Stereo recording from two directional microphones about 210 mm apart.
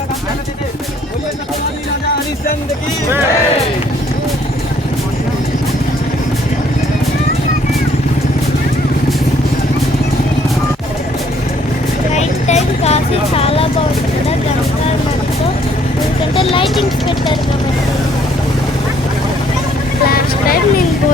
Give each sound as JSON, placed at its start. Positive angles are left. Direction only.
{"t": 12.1, "sound": "music", "side_deg": 30}
{"t": 16.3, "sound": "music", "side_deg": 25}
{"t": 20.1, "sound": "speech", "side_deg": 45}